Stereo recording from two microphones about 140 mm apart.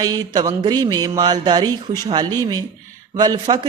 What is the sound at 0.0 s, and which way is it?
Speech, 25° right (ahead or behind).